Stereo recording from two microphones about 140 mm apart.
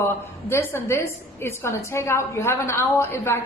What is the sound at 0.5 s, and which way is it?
A woman's voice, 20° left (ahead or behind).